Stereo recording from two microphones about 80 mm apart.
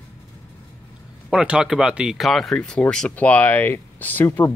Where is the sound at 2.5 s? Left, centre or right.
Centre; by 4.5 s left.